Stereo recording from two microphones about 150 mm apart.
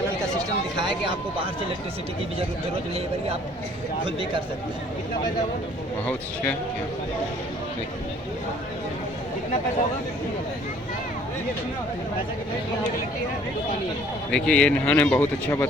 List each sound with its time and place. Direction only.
0.8 s speech: 35° right (ahead or behind)
14.3 s speech: 5° left (ahead or behind)